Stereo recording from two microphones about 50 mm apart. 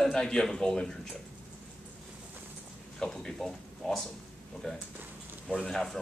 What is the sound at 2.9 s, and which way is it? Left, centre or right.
Speech, centre.